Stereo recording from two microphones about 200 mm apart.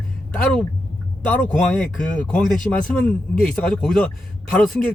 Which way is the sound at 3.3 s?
45° left (ahead or behind).